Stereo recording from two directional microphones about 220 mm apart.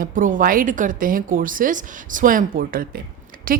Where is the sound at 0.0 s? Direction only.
35° right (ahead or behind).